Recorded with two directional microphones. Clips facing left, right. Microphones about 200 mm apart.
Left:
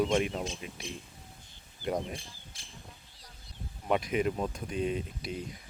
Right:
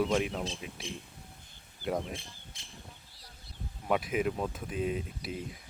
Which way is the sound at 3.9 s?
5° right (ahead or behind).